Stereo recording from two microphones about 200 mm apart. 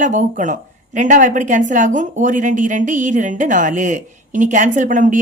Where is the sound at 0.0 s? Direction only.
40° right (ahead or behind).